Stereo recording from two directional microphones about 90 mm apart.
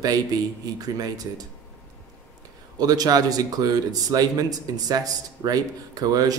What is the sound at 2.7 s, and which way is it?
Speech, 45° right (ahead or behind).